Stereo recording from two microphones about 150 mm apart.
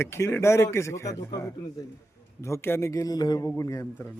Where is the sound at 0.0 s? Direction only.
15° left (ahead or behind).